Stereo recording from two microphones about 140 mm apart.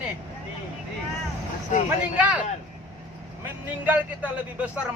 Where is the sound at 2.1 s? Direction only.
10° right (ahead or behind).